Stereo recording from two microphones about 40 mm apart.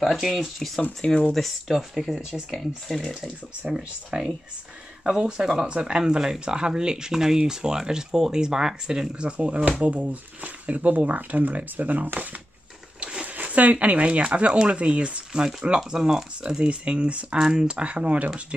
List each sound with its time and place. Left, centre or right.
0.4 s speech: centre
1.8 s speech: centre
5.7 s speech: right
13.0 s speech: right; by 16.3 s centre
16.4 s speech: right
17.4 s speech: centre